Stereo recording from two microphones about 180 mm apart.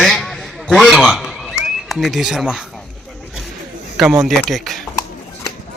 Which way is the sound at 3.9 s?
Centre (ahead or behind).